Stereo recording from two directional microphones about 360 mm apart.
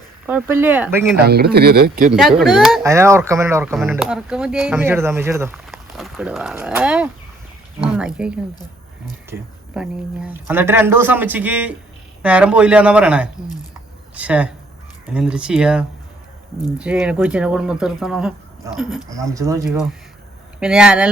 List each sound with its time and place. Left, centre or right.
0.3 s speech: centre
1.2 s speech: right
2.6 s speech: centre
9.7 s speech: centre